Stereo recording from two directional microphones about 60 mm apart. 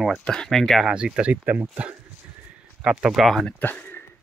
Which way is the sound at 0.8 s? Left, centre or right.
Centre.